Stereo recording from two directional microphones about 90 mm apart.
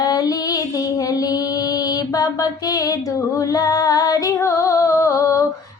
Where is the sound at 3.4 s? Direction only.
40° left (ahead or behind).